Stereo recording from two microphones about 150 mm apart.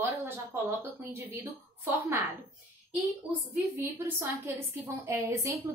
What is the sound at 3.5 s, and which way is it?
A woman's voice, 15° right (ahead or behind).